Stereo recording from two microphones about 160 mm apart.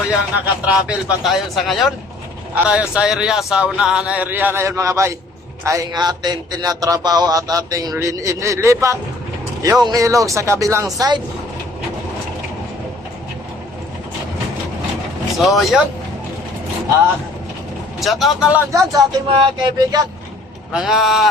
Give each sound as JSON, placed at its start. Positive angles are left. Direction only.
{"t": 0.1, "sound": "a man's voice", "side_deg": -5}
{"t": 15.4, "sound": "a man's voice", "side_deg": 0}
{"t": 18.0, "sound": "a man's voice", "side_deg": 0}
{"t": 18.7, "sound": "a man's voice", "side_deg": -20}
{"t": 20.7, "sound": "a man's voice", "side_deg": -5}